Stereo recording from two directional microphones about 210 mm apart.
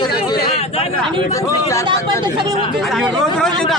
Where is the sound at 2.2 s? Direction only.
20° right (ahead or behind).